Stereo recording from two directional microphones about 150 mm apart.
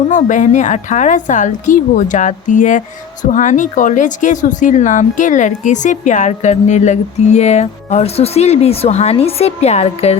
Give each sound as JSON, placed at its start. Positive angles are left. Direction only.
{"t": 0.1, "sound": "a woman's voice", "side_deg": 60}